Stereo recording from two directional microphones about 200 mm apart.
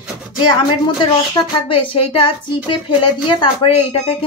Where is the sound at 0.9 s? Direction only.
25° left (ahead or behind).